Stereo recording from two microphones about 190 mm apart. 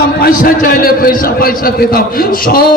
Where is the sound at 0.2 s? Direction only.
50° left (ahead or behind).